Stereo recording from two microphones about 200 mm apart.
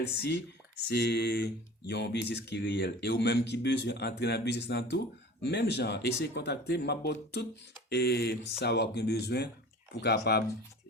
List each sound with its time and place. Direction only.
0.9 s speech: 55° left (ahead or behind)